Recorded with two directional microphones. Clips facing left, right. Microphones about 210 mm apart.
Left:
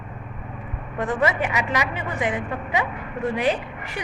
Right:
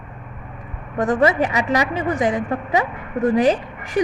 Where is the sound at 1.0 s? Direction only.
40° right (ahead or behind).